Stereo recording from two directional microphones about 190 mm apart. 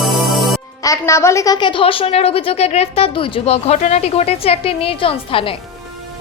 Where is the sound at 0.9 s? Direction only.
15° left (ahead or behind).